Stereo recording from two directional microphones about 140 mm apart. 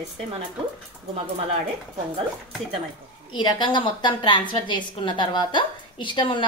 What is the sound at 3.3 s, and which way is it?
A woman's voice, 30° left (ahead or behind).